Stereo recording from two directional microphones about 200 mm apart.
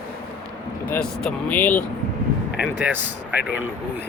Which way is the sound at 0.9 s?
5° left (ahead or behind).